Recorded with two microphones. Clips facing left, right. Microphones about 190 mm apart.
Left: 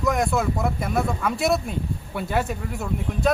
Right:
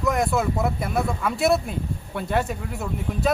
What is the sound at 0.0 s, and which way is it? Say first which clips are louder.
Speech: even; centre (ahead or behind).